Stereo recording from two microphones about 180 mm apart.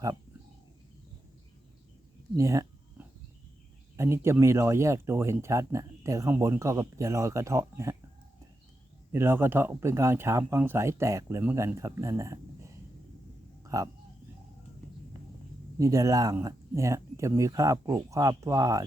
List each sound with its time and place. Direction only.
2.3 s a sound: 15° right (ahead or behind)
3.9 s speech: 15° right (ahead or behind)
9.1 s speech: 15° right (ahead or behind)
15.8 s speech: 15° right (ahead or behind)